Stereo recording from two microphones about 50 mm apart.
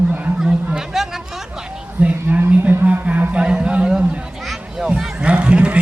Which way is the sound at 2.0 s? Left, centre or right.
Right.